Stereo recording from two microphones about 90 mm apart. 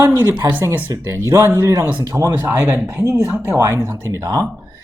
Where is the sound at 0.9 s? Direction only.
35° right (ahead or behind).